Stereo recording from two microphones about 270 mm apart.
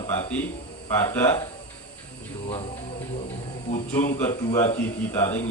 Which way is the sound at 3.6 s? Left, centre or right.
Left.